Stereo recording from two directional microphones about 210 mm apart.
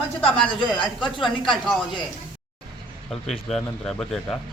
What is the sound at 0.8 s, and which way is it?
Speech, 25° left (ahead or behind).